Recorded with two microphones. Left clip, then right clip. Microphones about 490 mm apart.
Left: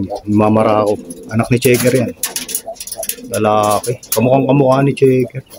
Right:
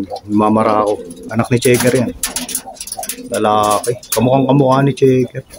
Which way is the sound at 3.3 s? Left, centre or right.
Left.